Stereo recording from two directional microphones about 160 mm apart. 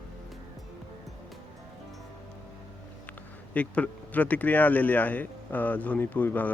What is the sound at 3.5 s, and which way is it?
Speech, 10° left (ahead or behind).